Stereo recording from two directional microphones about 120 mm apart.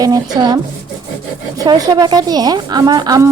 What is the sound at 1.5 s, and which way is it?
A woman's voice, 35° right (ahead or behind).